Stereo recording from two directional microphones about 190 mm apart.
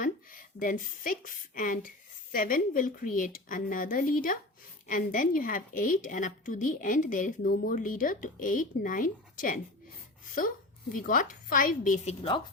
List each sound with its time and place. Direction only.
0.0 s a woman's voice: 45° left (ahead or behind)
10.9 s a woman's voice: 45° left (ahead or behind)